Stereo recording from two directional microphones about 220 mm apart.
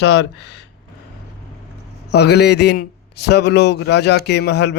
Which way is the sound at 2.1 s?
45° left (ahead or behind).